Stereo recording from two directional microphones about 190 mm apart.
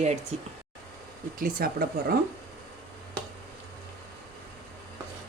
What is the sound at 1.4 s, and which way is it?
Speech, 50° right (ahead or behind).